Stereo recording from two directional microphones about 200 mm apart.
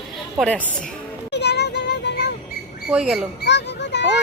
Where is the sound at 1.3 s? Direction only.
60° left (ahead or behind).